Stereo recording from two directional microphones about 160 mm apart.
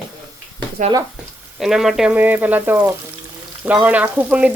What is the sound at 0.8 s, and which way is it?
Speech, 55° right (ahead or behind).